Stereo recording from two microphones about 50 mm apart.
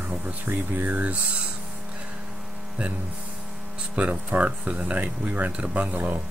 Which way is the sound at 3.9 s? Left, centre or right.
Right.